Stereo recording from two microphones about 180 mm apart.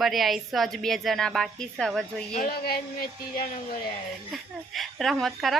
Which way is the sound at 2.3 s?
55° left (ahead or behind).